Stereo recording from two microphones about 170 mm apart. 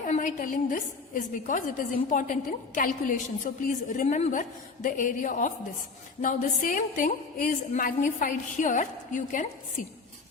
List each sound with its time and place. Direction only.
0.1 s a woman's voice: 50° left (ahead or behind)